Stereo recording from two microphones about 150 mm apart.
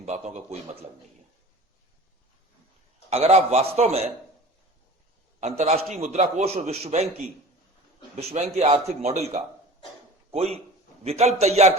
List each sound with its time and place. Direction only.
3.1 s a man's voice: 45° right (ahead or behind)
5.4 s a man's voice: 45° right (ahead or behind)